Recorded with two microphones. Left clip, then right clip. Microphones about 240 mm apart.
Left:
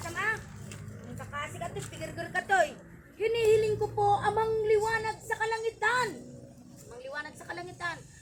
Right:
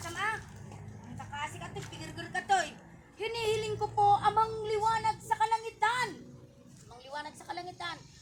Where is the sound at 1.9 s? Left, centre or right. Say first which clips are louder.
Left 4 dB; centre.